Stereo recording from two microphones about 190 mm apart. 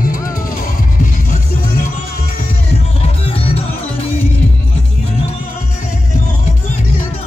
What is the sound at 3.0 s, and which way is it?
Music, 30° left (ahead or behind).